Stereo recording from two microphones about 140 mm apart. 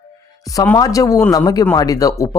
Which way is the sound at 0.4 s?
25° left (ahead or behind).